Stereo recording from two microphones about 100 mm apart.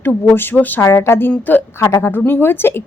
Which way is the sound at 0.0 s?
20° left (ahead or behind).